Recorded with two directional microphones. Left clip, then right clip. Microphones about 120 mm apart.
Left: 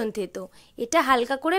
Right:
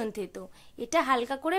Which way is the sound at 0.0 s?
35° left (ahead or behind).